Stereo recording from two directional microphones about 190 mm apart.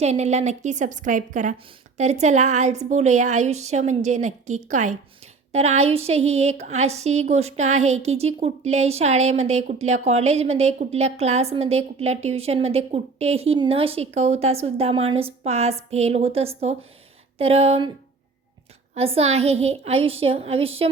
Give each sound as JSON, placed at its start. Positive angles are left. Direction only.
{"t": 0.0, "sound": "a woman's voice", "side_deg": -35}
{"t": 18.9, "sound": "a woman's voice", "side_deg": -30}